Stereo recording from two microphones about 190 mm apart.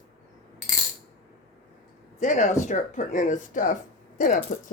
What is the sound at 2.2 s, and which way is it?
Speech, 40° left (ahead or behind).